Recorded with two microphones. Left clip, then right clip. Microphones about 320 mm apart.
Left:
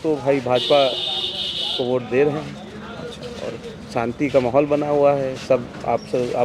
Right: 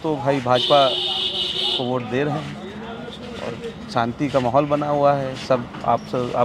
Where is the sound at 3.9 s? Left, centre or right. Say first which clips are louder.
Left 2 dB; right.